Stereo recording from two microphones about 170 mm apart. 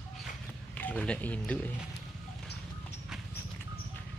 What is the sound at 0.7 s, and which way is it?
Speech, 5° left (ahead or behind).